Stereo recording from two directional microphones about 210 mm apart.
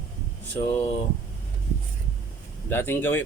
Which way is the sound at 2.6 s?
10° left (ahead or behind).